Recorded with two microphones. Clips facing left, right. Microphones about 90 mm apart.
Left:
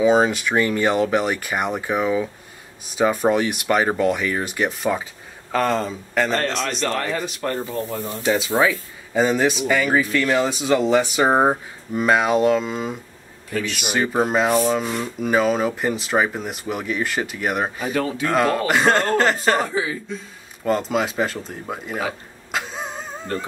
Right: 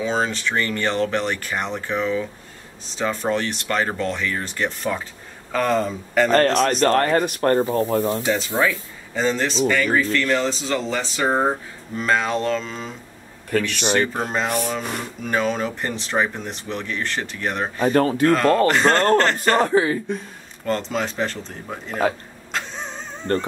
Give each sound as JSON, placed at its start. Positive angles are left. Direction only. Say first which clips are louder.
{"t": 0.0, "sound": "speech", "louder": "left 6 dB", "side_deg": 10}
{"t": 6.3, "sound": "speech", "louder": "right 6 dB", "side_deg": -45}
{"t": 8.5, "sound": "speech", "louder": "left 2 dB", "side_deg": 15}
{"t": 13.5, "sound": "a man's voice", "louder": "right 3 dB", "side_deg": -55}
{"t": 13.9, "sound": "speech", "louder": "left 5 dB", "side_deg": 10}
{"t": 17.8, "sound": "speech", "louder": "right 10 dB", "side_deg": -50}
{"t": 18.3, "sound": "speech", "louder": "even", "side_deg": 10}
{"t": 19.6, "sound": "speech", "louder": "right 6 dB", "side_deg": -55}
{"t": 20.6, "sound": "speech", "louder": "left 3 dB", "side_deg": 5}
{"t": 22.5, "sound": "a sound", "louder": "left 2 dB", "side_deg": 5}